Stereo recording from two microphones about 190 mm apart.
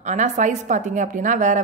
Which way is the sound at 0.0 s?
40° right (ahead or behind).